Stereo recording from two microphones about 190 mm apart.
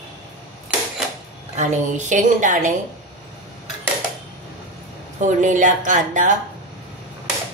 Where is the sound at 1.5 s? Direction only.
40° right (ahead or behind).